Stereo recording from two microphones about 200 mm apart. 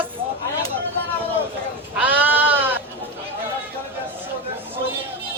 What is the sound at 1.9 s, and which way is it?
Goat, 10° right (ahead or behind).